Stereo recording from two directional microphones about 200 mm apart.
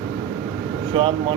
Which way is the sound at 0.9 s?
25° right (ahead or behind).